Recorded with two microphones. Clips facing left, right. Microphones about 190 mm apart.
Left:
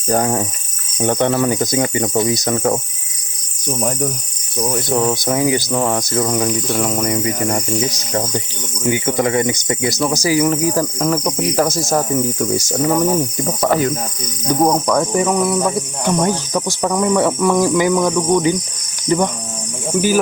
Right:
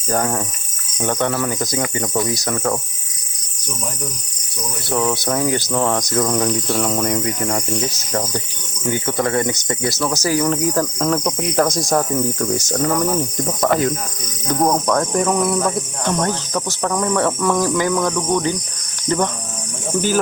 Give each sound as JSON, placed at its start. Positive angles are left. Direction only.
{"t": 0.1, "sound": "speech", "side_deg": 20}
{"t": 3.8, "sound": "speech", "side_deg": 55}
{"t": 4.9, "sound": "speech", "side_deg": 15}
{"t": 7.9, "sound": "speech", "side_deg": 15}
{"t": 13.3, "sound": "cricket", "side_deg": 5}
{"t": 14.4, "sound": "speech", "side_deg": 15}